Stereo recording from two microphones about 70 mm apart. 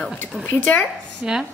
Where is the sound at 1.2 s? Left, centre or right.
Centre.